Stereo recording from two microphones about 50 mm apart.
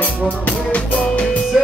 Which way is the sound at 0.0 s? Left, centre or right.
Left.